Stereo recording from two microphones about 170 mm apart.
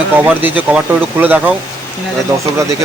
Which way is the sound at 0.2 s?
10° right (ahead or behind).